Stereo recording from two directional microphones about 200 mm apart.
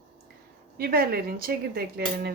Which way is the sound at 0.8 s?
50° right (ahead or behind).